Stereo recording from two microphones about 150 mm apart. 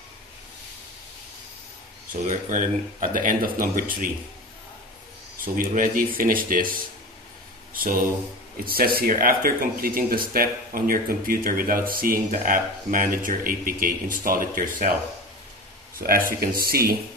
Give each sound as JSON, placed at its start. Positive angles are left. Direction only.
{"t": 2.2, "sound": "speech", "side_deg": -60}
{"t": 5.4, "sound": "speech", "side_deg": -70}
{"t": 7.7, "sound": "a sound", "side_deg": -70}
{"t": 8.6, "sound": "speech", "side_deg": -80}
{"t": 16.0, "sound": "speech", "side_deg": -75}